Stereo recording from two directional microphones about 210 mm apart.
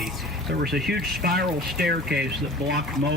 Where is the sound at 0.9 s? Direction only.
50° right (ahead or behind).